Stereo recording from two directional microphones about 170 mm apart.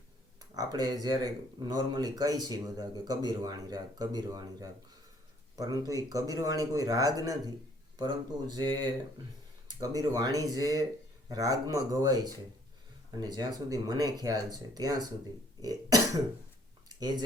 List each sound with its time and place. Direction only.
0.5 s speech: 20° right (ahead or behind)
10.0 s speech: 20° right (ahead or behind)
15.6 s cough: 20° right (ahead or behind)
17.0 s speech: 25° right (ahead or behind)